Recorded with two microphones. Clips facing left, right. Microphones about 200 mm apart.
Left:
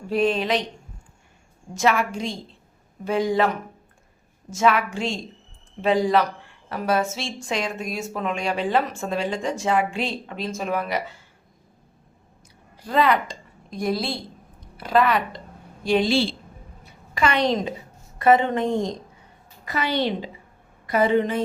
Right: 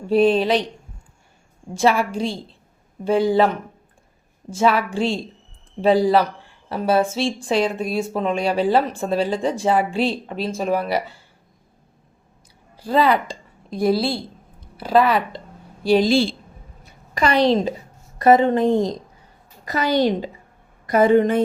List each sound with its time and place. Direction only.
0.1 s speech: 35° right (ahead or behind)
1.7 s speech: 30° right (ahead or behind)
12.7 s a woman's voice: 30° right (ahead or behind); by 21.4 s 50° right (ahead or behind)